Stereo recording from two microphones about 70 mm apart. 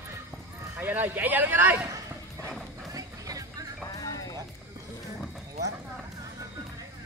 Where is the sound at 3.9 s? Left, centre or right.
Left.